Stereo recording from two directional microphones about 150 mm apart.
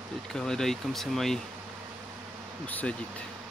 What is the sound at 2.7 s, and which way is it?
Speech, 10° left (ahead or behind).